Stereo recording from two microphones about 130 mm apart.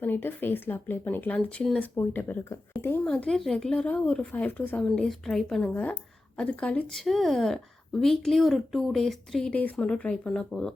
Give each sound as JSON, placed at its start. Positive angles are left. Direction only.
{"t": 0.0, "sound": "speech", "side_deg": 15}
{"t": 2.0, "sound": "a woman's voice", "side_deg": 15}